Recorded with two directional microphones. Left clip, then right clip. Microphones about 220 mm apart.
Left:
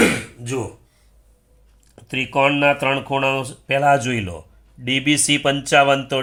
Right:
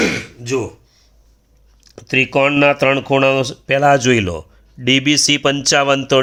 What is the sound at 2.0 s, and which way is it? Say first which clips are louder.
Speech: right 4 dB; 45° right (ahead or behind).